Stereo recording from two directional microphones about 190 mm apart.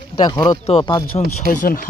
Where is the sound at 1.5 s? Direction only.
45° left (ahead or behind).